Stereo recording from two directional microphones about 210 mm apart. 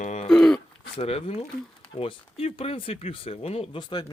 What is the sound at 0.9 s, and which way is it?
Speech, 25° left (ahead or behind).